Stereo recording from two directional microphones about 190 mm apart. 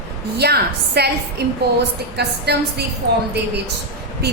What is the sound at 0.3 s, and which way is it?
A woman's voice, 60° right (ahead or behind).